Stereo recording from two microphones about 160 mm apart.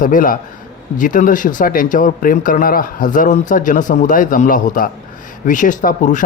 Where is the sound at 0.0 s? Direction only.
55° left (ahead or behind).